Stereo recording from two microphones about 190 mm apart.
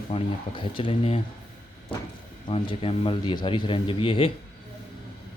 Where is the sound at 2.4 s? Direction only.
25° left (ahead or behind).